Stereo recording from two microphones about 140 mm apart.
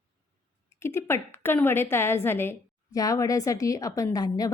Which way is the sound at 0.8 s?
20° left (ahead or behind).